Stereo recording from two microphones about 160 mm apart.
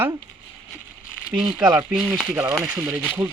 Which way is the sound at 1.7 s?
5° right (ahead or behind).